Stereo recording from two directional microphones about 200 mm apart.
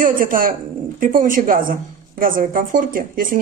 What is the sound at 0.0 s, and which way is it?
Speech, 40° right (ahead or behind).